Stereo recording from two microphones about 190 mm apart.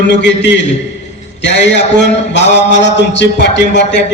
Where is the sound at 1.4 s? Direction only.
70° left (ahead or behind).